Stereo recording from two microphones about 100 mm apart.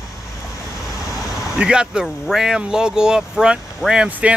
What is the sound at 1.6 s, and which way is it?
Speech, 10° right (ahead or behind).